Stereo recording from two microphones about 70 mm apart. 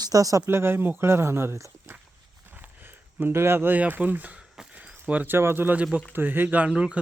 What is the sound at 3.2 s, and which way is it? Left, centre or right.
Speech, right.